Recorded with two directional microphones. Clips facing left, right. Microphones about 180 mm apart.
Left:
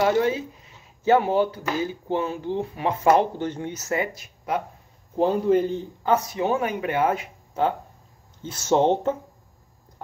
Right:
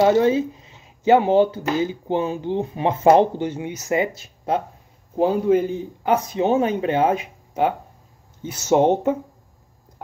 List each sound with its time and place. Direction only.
0.0 s speech: 25° right (ahead or behind)
3.3 s speech: 10° right (ahead or behind); by 4.6 s 25° right (ahead or behind)
5.1 s a man's voice: 5° right (ahead or behind)
6.0 s speech: 20° right (ahead or behind)